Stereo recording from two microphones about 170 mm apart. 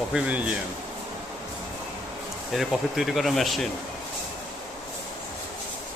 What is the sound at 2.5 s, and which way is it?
Speech, centre (ahead or behind).